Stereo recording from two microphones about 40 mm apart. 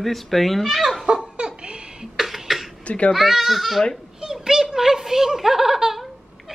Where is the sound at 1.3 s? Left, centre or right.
Right.